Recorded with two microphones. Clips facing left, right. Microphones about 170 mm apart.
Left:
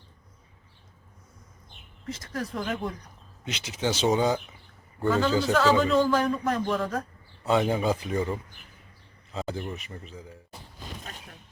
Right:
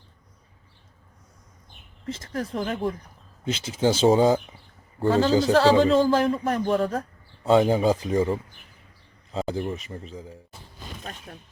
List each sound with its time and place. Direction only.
2.0 s a man's voice: 25° right (ahead or behind)